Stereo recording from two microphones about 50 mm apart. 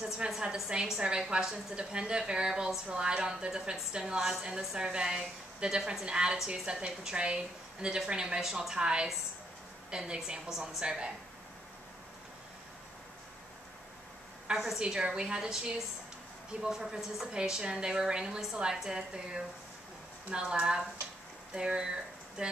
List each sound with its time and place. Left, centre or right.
0.2 s a woman's voice: centre
14.5 s a woman's voice: centre